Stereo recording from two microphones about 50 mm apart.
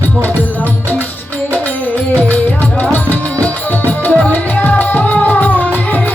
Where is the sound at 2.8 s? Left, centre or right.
Left.